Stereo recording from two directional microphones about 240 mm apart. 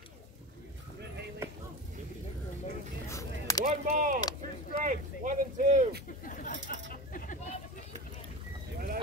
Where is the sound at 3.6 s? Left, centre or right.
Right.